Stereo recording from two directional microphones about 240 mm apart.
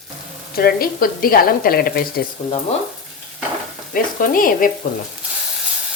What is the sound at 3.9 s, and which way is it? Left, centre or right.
Speech, left.